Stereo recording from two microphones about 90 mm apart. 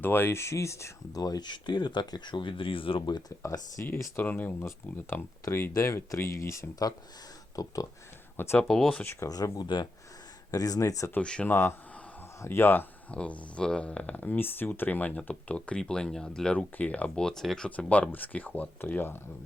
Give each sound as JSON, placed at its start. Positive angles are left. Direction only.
{"t": 0.0, "sound": "speech", "side_deg": 25}
{"t": 3.1, "sound": "speech", "side_deg": 55}
{"t": 3.4, "sound": "speech", "side_deg": 35}
{"t": 8.4, "sound": "speech", "side_deg": 25}
{"t": 8.6, "sound": "speech", "side_deg": 5}
{"t": 9.3, "sound": "speech", "side_deg": 45}
{"t": 11.1, "sound": "speech", "side_deg": 15}
{"t": 11.5, "sound": "speech", "side_deg": 30}
{"t": 13.1, "sound": "speech", "side_deg": 15}
{"t": 17.7, "sound": "speech", "side_deg": 15}